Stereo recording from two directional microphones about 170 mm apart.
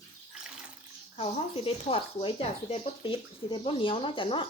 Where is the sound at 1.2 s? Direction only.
35° left (ahead or behind).